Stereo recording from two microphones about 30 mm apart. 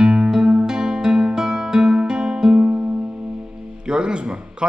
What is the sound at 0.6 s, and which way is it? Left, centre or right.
Music, right.